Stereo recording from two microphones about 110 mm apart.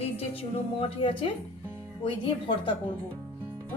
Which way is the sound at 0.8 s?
50° left (ahead or behind).